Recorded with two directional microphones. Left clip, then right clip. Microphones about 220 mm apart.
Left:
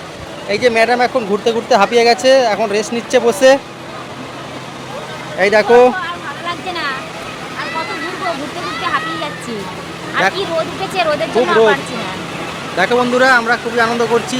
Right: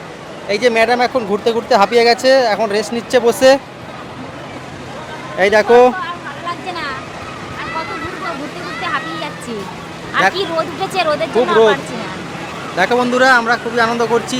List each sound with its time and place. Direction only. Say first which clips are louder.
0.4 s speech: even; 10° right (ahead or behind)
5.4 s speech: even; 10° right (ahead or behind)
8.8 s speech: left 2 dB; centre (ahead or behind)
10.2 s speech: right 1 dB; 20° right (ahead or behind)
11.2 s speech: even; 5° left (ahead or behind)
12.7 s speech: left 1 dB; 10° right (ahead or behind)